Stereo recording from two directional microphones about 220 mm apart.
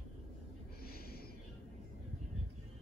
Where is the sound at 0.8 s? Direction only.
45° left (ahead or behind).